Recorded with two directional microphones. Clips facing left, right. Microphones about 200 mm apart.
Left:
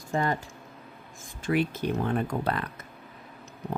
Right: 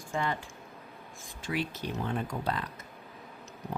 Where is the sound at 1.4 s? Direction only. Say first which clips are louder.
Left 7 dB; 50° left (ahead or behind).